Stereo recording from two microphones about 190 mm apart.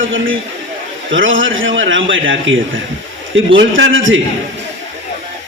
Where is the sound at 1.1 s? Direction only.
90° right.